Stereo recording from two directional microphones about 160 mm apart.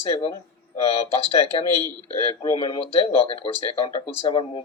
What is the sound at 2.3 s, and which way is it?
Speech, 30° left (ahead or behind).